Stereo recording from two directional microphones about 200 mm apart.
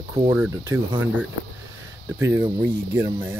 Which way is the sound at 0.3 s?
10° right (ahead or behind).